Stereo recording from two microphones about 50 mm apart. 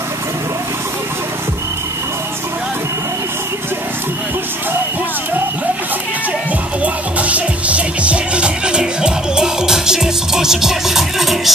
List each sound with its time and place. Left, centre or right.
6.8 s music: right; by 11.5 s centre